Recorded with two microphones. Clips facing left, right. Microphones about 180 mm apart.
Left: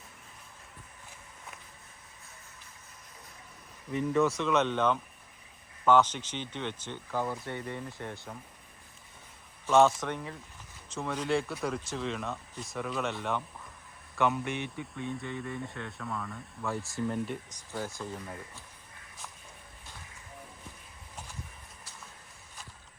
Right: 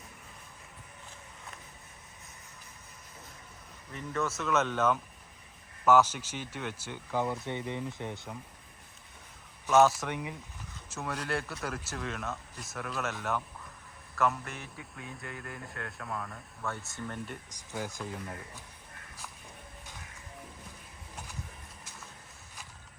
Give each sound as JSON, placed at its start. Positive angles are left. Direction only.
{"t": 3.9, "sound": "speech", "side_deg": 0}
{"t": 9.6, "sound": "speech", "side_deg": -5}
{"t": 17.7, "sound": "speech", "side_deg": -15}
{"t": 18.0, "sound": "speech", "side_deg": 0}